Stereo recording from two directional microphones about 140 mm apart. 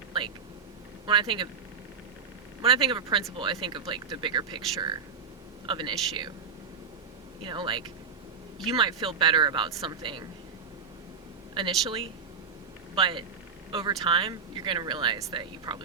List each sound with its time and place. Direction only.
1.0 s speech: 35° right (ahead or behind)
2.6 s speech: 40° right (ahead or behind)
7.4 s speech: 35° right (ahead or behind)
11.5 s a man's voice: 35° right (ahead or behind)